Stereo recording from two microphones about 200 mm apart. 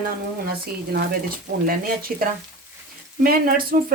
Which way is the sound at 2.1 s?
45° right (ahead or behind).